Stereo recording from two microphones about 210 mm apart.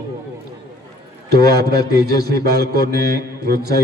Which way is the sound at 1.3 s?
50° right (ahead or behind).